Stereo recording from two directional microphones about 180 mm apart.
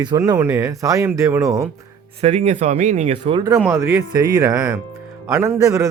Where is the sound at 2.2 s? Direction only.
35° right (ahead or behind).